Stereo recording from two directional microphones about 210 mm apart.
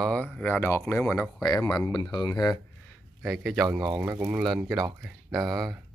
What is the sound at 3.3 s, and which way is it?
Speech, centre (ahead or behind).